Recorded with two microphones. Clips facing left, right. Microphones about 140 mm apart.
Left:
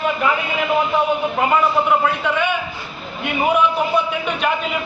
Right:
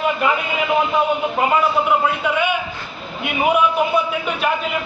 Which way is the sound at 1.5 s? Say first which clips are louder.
Left 1 dB; 5° right (ahead or behind).